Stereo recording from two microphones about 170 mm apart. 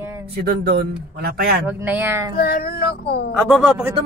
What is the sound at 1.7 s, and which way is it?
Speech, 10° right (ahead or behind).